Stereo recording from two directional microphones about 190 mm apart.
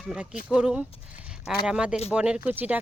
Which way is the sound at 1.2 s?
5° right (ahead or behind).